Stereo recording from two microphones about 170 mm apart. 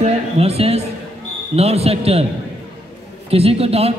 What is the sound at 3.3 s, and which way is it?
Speech, 35° right (ahead or behind).